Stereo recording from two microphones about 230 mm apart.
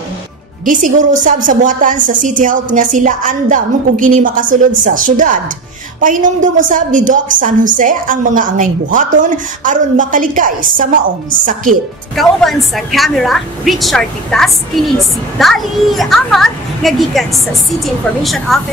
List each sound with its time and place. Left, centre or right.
0.7 s a woman's voice: right
12.2 s a woman's voice: centre